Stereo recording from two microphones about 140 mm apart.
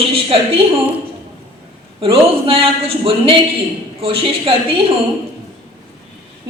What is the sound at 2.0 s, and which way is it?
A woman's voice, 40° right (ahead or behind).